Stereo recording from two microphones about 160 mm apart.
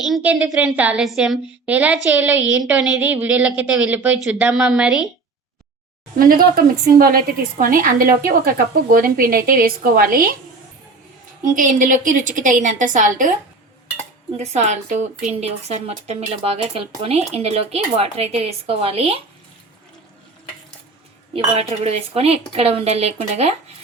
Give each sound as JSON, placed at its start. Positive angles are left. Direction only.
{"t": 0.0, "sound": "a woman's voice", "side_deg": -5}
{"t": 6.1, "sound": "a woman's voice", "side_deg": -65}
{"t": 11.5, "sound": "a woman's voice", "side_deg": -55}
{"t": 14.3, "sound": "a woman's voice", "side_deg": -45}
{"t": 21.3, "sound": "speech", "side_deg": -40}